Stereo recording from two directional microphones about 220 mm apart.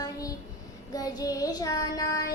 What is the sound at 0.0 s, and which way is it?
Child singing, 15° left (ahead or behind).